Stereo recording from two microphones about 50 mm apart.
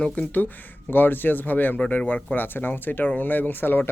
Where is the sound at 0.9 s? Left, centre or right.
Left.